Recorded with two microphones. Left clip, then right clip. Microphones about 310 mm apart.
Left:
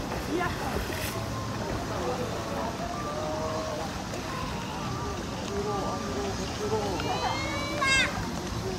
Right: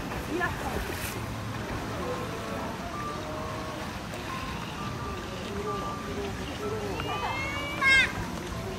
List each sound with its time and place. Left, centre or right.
7.8 s music: left